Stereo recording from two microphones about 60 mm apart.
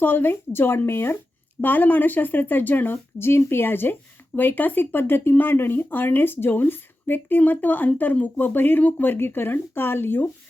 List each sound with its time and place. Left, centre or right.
0.0 s speech: left
1.6 s speech: left